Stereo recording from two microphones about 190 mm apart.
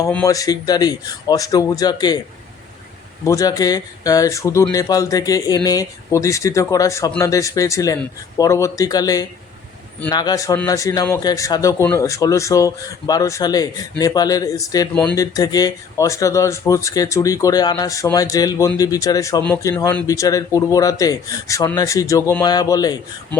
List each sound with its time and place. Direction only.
0.3 s speech: 20° left (ahead or behind)
3.2 s speech: 15° left (ahead or behind)
19.4 s speech: 10° left (ahead or behind)